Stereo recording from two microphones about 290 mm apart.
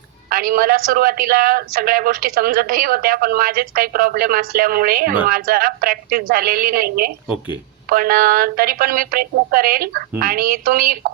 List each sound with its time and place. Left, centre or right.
0.3 s a woman's voice: right